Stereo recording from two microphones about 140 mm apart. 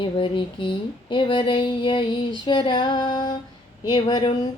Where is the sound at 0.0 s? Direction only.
35° left (ahead or behind).